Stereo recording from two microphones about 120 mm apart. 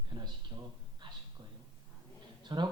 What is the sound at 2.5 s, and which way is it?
Speech, 35° right (ahead or behind).